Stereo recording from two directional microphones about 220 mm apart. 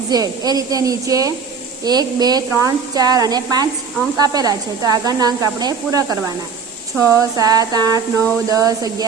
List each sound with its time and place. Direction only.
0.1 s speech: 15° right (ahead or behind)